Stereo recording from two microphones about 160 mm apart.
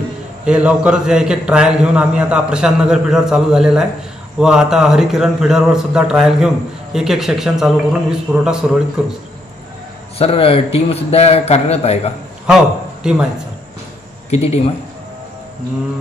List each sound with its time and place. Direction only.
0.5 s a man's voice: 5° right (ahead or behind)
10.1 s a man's voice: 35° left (ahead or behind)
12.4 s a man's voice: 5° right (ahead or behind)
14.3 s a man's voice: 40° left (ahead or behind)